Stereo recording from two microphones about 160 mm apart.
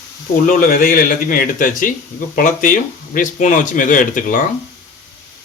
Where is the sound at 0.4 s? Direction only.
65° left (ahead or behind).